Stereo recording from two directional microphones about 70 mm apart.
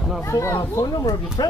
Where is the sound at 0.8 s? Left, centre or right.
Left.